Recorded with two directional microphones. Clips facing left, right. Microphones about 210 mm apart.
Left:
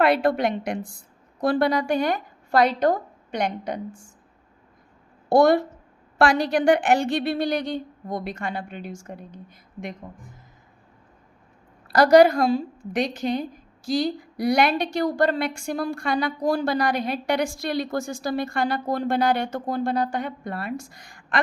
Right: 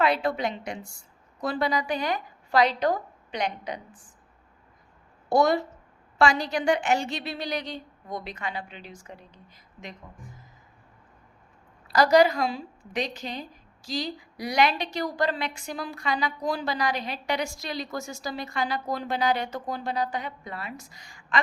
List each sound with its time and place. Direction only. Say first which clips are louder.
0.0 s a woman's voice: left 5 dB; 60° left (ahead or behind)
5.4 s a woman's voice: left 5 dB; 55° left (ahead or behind)
11.9 s a woman's voice: left 5 dB; 60° left (ahead or behind)